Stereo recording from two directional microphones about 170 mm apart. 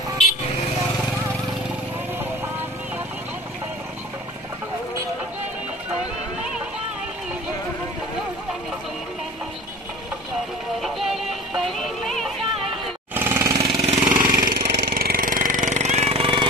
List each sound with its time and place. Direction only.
10.8 s music: centre (ahead or behind)
13.1 s jackhammer: 15° right (ahead or behind)
13.8 s vehicle: 40° right (ahead or behind); by 14.9 s 70° right (ahead or behind)
15.0 s jackhammer: 60° right (ahead or behind); by 16.4 s 30° right (ahead or behind)